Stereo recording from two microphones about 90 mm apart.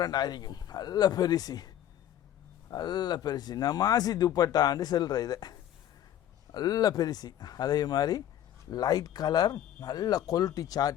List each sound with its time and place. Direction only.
0.0 s speech: 50° left (ahead or behind)